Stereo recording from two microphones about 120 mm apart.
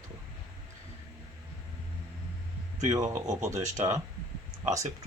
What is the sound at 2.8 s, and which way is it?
Speech, 30° right (ahead or behind).